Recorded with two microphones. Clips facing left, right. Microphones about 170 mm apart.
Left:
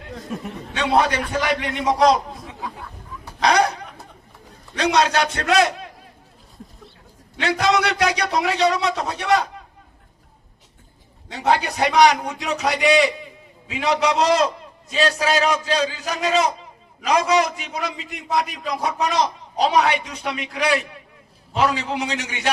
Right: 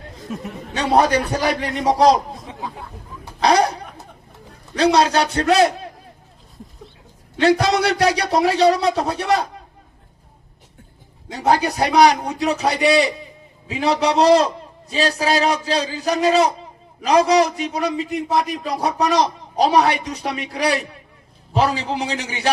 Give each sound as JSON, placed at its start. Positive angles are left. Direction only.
{"t": 0.2, "sound": "speech", "side_deg": 0}
{"t": 0.8, "sound": "a man's voice", "side_deg": -40}
{"t": 3.4, "sound": "a man's voice", "side_deg": -35}
{"t": 7.3, "sound": "a man's voice", "side_deg": -35}
{"t": 11.3, "sound": "a man's voice", "side_deg": -40}